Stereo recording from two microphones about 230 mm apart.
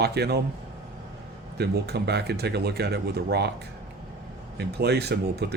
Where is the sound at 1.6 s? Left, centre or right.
Right.